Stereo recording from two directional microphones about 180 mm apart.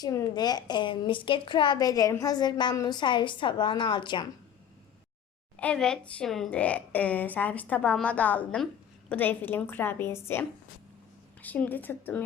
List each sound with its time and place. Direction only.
0.0 s a woman's voice: 20° left (ahead or behind)
5.5 s a woman's voice: 5° left (ahead or behind)
11.4 s a woman's voice: 10° left (ahead or behind)